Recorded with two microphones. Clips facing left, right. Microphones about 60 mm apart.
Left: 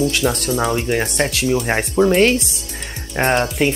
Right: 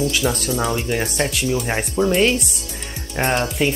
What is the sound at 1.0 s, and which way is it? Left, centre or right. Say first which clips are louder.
Speech: left 2 dB; left.